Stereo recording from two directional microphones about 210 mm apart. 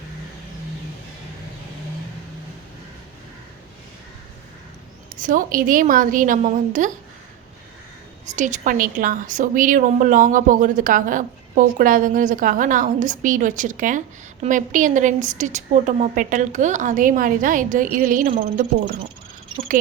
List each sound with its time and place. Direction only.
5.2 s a woman's voice: 40° right (ahead or behind)
8.4 s a woman's voice: 35° right (ahead or behind)